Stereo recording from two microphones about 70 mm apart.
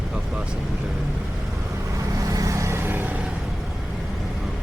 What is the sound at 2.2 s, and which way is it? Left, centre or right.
Vehicle, right.